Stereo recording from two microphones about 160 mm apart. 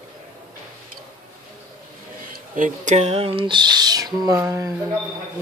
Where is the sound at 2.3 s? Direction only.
55° right (ahead or behind); by 4.8 s 20° right (ahead or behind).